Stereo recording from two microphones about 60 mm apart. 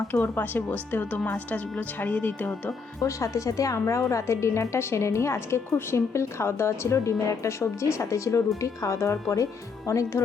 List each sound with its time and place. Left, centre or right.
0.1 s a woman's voice: left
3.0 s a woman's voice: left